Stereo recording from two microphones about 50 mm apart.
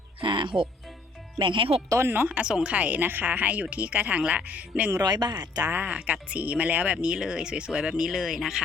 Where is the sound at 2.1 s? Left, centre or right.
Right.